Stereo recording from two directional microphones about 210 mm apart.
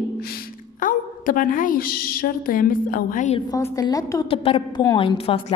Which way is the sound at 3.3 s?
15° left (ahead or behind).